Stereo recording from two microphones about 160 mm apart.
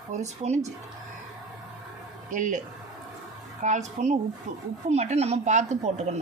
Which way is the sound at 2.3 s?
50° right (ahead or behind).